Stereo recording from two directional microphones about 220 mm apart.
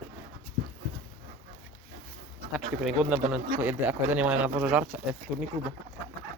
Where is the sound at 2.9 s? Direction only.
Centre (ahead or behind).